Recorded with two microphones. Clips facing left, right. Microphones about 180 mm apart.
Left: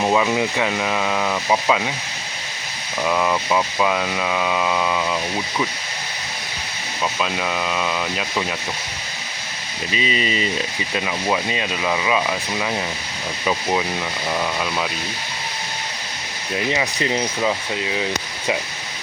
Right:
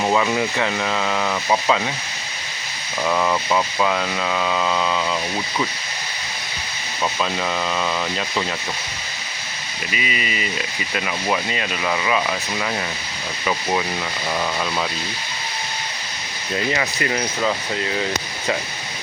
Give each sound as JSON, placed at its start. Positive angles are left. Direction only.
{"t": 0.0, "sound": "speech", "side_deg": 10}
{"t": 3.1, "sound": "speech", "side_deg": 5}
{"t": 7.2, "sound": "speech", "side_deg": 5}
{"t": 9.9, "sound": "sanding", "side_deg": 30}
{"t": 10.9, "sound": "sanding", "side_deg": 20}
{"t": 11.9, "sound": "speech", "side_deg": 15}
{"t": 16.7, "sound": "speech", "side_deg": 20}